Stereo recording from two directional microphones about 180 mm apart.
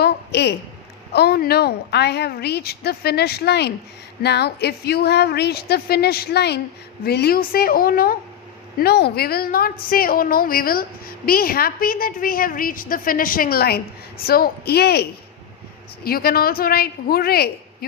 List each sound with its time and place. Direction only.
0.0 s a sound: 70° left (ahead or behind)
1.1 s a woman's voice: 60° left (ahead or behind)
16.0 s a woman's voice: 55° left (ahead or behind)